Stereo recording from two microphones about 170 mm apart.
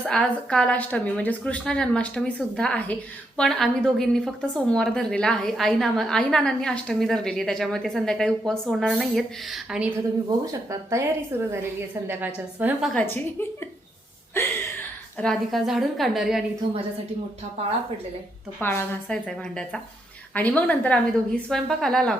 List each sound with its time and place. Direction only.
0.1 s a woman's voice: 5° left (ahead or behind)
10.2 s a woman's voice: 20° right (ahead or behind)
12.9 s a woman's voice: 10° left (ahead or behind)
15.2 s a woman's voice: centre (ahead or behind)
18.6 s a woman's voice: 15° left (ahead or behind)